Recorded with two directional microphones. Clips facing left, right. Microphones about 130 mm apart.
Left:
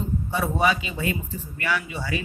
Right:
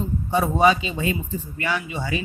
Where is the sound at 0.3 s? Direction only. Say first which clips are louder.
Right 5 dB; 20° right (ahead or behind).